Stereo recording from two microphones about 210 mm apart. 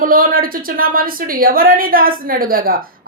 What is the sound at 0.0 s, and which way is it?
A woman's voice, 45° right (ahead or behind).